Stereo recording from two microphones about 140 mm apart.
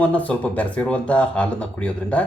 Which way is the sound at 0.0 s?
10° left (ahead or behind).